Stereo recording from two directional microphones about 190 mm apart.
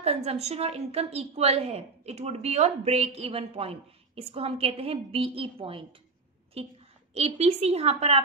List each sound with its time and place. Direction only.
0.0 s a woman's voice: 30° right (ahead or behind)